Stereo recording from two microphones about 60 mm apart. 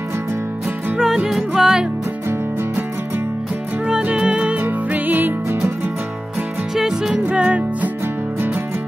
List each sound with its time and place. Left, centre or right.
0.9 s music: centre
3.8 s music: centre
4.6 s music: right
6.7 s music: centre
7.2 s music: right